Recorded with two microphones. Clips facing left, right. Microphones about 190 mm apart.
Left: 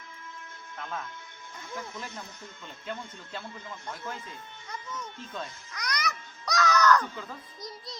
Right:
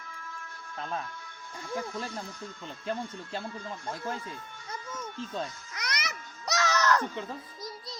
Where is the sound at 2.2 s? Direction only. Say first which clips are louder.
Right 5 dB; 20° left (ahead or behind).